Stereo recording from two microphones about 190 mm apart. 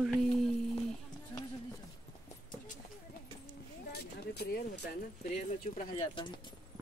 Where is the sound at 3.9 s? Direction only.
55° left (ahead or behind).